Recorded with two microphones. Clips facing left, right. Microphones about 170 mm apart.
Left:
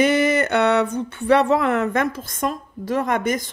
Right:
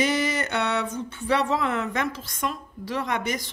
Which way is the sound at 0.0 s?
60° left (ahead or behind).